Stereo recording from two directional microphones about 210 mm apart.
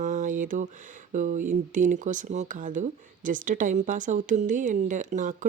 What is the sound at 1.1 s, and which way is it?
Speech, 35° right (ahead or behind).